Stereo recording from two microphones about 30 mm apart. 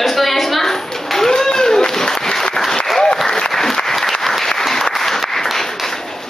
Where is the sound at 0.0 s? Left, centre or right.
Centre.